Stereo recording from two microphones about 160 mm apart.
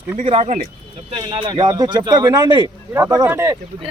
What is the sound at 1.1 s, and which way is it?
Speech, 30° right (ahead or behind).